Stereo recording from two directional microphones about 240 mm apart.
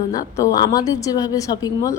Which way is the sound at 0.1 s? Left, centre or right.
Centre.